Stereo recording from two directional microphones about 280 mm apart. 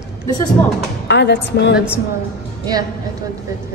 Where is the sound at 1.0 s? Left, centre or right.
Left.